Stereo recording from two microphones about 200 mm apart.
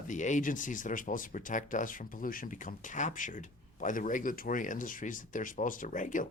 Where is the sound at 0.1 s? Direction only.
40° left (ahead or behind).